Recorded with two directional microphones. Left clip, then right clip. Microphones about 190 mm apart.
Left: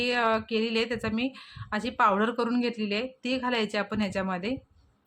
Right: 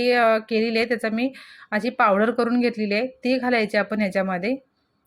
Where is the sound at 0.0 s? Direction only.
10° right (ahead or behind).